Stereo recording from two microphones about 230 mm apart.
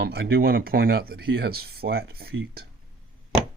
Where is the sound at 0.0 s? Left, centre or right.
Right.